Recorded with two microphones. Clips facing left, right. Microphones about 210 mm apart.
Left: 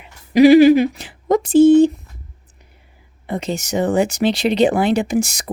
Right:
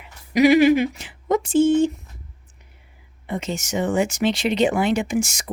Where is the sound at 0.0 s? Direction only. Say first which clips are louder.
Left 6 dB; 30° left (ahead or behind).